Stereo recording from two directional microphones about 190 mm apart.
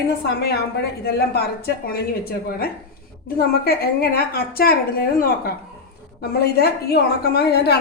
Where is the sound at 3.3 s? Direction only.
55° left (ahead or behind).